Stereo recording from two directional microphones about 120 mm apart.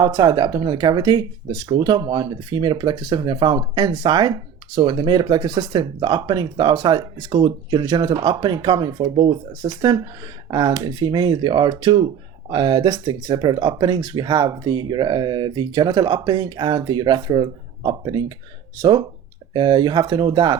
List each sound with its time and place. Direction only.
0.0 s speech: 35° right (ahead or behind)